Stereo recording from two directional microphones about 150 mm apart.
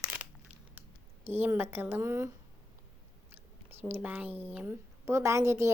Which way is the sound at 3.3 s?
15° right (ahead or behind).